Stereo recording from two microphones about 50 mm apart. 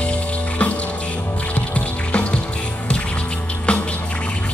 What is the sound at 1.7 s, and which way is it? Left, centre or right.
Music, left.